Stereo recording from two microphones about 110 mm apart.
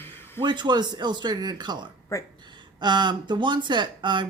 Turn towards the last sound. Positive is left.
turn(degrees=-45)  # may be behind; listen again after turning